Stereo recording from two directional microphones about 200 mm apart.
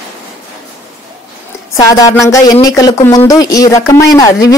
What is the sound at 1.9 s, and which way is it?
Speech, 15° left (ahead or behind).